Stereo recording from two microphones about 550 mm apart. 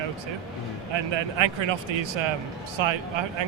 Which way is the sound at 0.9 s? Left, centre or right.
Right.